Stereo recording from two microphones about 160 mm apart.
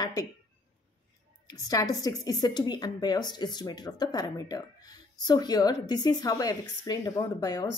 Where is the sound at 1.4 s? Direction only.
25° left (ahead or behind).